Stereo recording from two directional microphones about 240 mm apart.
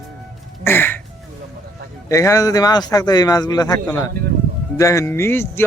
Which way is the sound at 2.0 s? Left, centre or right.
Centre.